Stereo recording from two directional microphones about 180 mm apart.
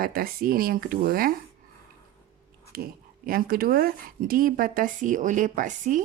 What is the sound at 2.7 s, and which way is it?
Speech, 55° right (ahead or behind).